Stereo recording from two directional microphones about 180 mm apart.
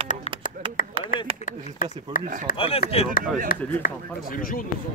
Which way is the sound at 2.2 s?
45° right (ahead or behind).